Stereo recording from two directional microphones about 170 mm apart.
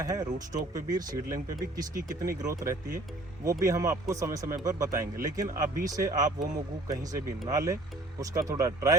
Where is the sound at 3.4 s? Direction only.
20° right (ahead or behind).